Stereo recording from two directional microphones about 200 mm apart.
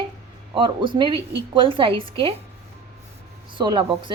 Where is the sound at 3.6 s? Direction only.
25° right (ahead or behind).